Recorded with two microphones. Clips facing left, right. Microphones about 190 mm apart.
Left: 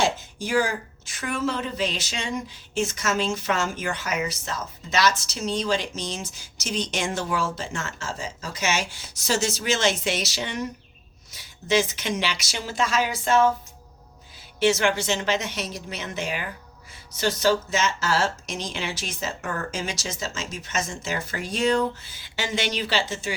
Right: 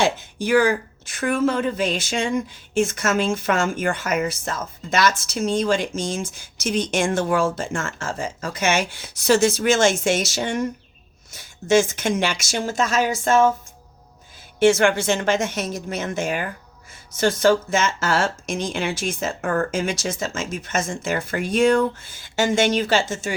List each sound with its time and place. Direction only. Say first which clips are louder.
0.0 s speech: right 4 dB; 60° right (ahead or behind); by 13.5 s 45° right (ahead or behind)
14.6 s speech: right 5 dB; 50° right (ahead or behind)